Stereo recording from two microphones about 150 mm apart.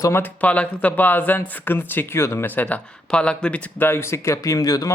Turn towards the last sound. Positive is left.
turn(degrees=25)  # may be behind; listen again after turning